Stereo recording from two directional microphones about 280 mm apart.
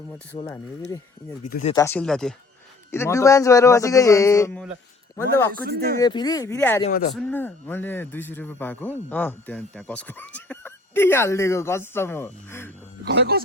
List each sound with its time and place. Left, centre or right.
0.3 s speech: centre
1.5 s speech: left
1.7 s speech: centre
5.6 s speech: right
6.0 s speech: centre
6.8 s speech: left
7.2 s speech: centre
13.1 s speech: right